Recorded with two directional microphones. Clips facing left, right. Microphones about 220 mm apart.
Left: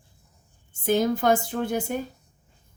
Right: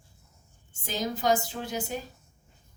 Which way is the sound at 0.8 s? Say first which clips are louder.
Left 6 dB; 55° left (ahead or behind).